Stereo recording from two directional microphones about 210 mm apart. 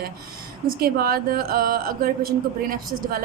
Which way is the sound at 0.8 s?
45° right (ahead or behind).